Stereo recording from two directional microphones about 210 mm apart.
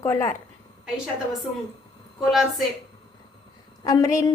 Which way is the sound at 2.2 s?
Centre (ahead or behind).